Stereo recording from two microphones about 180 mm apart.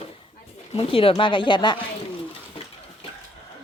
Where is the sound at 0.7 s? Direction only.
30° left (ahead or behind).